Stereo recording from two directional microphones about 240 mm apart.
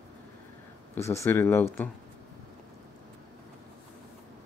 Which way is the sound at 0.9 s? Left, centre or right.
Centre.